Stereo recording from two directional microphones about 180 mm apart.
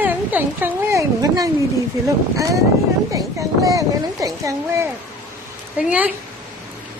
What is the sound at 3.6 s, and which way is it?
Speech, 20° right (ahead or behind).